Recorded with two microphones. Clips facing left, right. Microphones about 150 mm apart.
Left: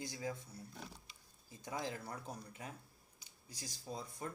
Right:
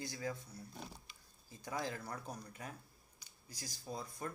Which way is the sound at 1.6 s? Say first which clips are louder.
Right 1 dB; 20° left (ahead or behind).